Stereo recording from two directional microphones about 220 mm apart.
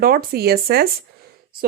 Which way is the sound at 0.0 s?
45° right (ahead or behind).